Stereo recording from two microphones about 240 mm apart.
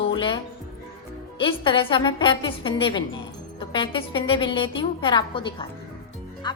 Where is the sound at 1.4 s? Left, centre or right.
Left.